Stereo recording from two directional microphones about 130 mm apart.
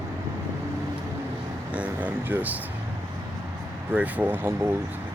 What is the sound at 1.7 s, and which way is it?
Speech, 10° right (ahead or behind).